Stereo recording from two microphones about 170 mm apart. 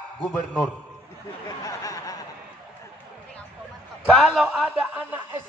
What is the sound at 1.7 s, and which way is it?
Speech, 20° left (ahead or behind).